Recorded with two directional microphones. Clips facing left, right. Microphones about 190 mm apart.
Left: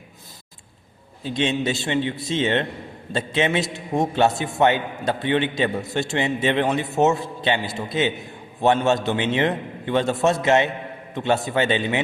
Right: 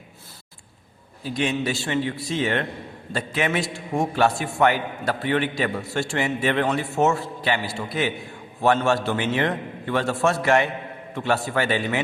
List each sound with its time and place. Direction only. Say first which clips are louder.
1.2 s a man's voice: left 2 dB; 25° left (ahead or behind)